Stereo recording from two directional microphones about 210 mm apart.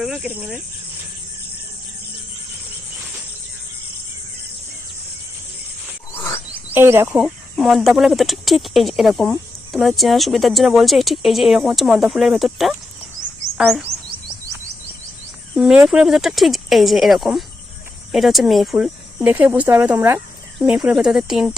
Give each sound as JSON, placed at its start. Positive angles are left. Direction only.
{"t": 0.0, "sound": "speech", "side_deg": -5}
{"t": 6.7, "sound": "speech", "side_deg": -10}
{"t": 15.5, "sound": "speech", "side_deg": -5}